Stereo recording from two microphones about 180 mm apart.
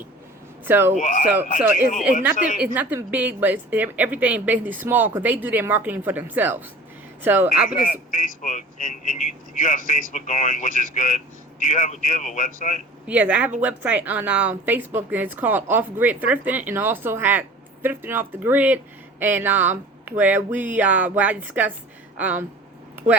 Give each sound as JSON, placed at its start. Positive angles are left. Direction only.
{"t": 0.6, "sound": "speech", "side_deg": -10}
{"t": 0.9, "sound": "speech", "side_deg": 40}
{"t": 2.3, "sound": "a man's voice", "side_deg": 45}
{"t": 2.6, "sound": "a woman's voice", "side_deg": -10}
{"t": 7.7, "sound": "a man's voice", "side_deg": 45}
{"t": 13.1, "sound": "a woman's voice", "side_deg": -10}